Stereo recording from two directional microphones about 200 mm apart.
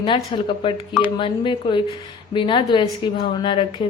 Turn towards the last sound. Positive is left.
turn(degrees=25)  # may be behind; listen again after turning